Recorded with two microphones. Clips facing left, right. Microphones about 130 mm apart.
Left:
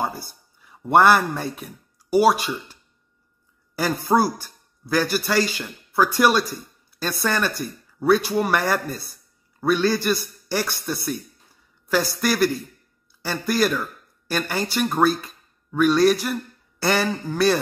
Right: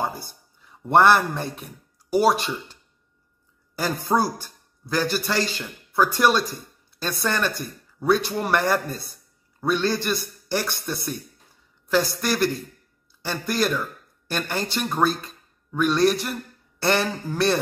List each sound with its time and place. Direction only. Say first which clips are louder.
0.8 s speech: left 1 dB; 5° left (ahead or behind)
4.1 s a man's voice: left 3 dB; 15° left (ahead or behind)